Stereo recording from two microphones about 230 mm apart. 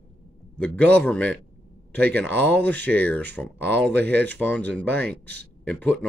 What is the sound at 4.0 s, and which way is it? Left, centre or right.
Speech, right.